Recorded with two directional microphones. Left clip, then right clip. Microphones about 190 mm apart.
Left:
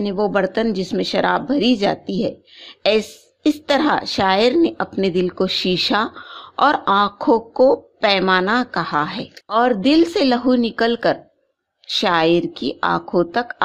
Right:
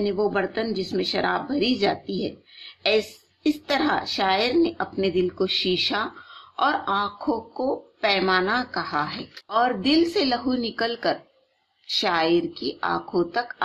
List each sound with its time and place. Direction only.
0.0 s speech: 45° left (ahead or behind)